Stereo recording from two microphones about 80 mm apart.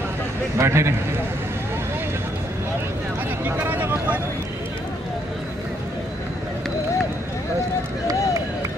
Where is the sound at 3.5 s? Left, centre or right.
Right.